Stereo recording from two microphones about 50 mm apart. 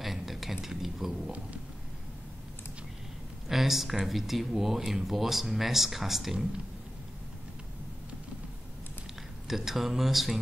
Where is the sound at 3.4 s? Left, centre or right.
Centre.